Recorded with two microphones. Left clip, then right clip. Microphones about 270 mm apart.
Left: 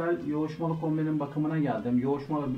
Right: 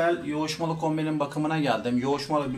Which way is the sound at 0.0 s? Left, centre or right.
Right.